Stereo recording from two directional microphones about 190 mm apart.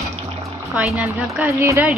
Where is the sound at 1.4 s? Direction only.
15° right (ahead or behind).